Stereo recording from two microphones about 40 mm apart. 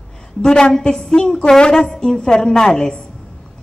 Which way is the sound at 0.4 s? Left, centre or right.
Centre.